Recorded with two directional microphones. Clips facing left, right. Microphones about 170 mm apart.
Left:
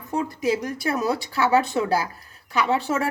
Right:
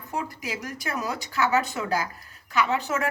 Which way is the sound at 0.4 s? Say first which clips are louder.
Left 9 dB; 30° left (ahead or behind).